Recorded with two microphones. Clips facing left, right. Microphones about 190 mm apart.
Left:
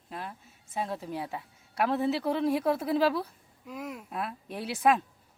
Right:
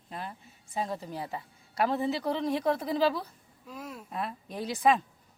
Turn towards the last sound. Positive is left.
turn(degrees=5)  # may be behind; listen again after turning